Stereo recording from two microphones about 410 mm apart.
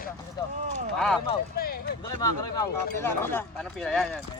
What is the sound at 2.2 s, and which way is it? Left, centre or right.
A man's voice, centre.